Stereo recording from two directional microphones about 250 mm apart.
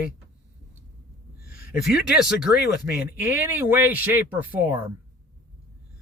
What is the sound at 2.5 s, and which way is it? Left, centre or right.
Speech, left.